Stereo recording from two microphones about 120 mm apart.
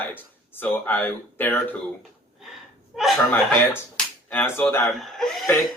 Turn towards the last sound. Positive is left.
turn(degrees=5)  # may be behind; listen again after turning